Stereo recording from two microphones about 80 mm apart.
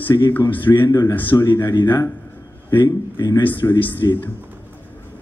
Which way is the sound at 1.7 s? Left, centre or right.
Left.